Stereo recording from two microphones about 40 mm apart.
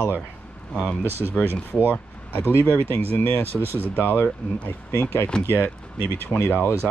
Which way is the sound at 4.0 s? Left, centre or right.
Left.